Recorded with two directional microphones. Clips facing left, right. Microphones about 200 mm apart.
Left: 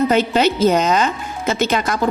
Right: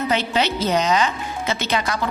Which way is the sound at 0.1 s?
45° left (ahead or behind).